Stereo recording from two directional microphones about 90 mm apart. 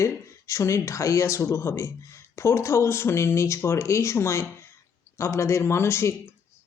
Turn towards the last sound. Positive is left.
turn(degrees=30)  # may be behind; listen again after turning